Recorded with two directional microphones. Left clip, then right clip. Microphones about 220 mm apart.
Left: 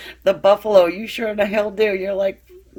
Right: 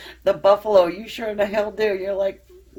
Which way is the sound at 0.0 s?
35° left (ahead or behind).